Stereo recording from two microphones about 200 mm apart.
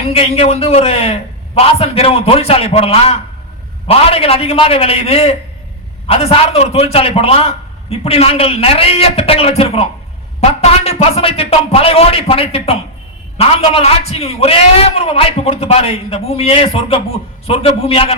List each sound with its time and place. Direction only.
0.0 s a man's voice: 30° left (ahead or behind)